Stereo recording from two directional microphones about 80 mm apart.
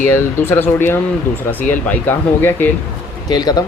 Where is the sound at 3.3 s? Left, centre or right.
Left.